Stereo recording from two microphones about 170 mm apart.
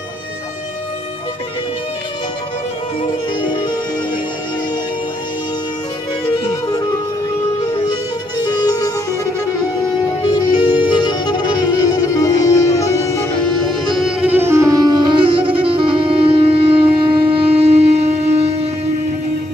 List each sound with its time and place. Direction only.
3.4 s music: 25° left (ahead or behind)
8.5 s music: 25° left (ahead or behind)
10.8 s music: 25° left (ahead or behind)
13.7 s music: centre (ahead or behind); by 18.7 s 40° right (ahead or behind)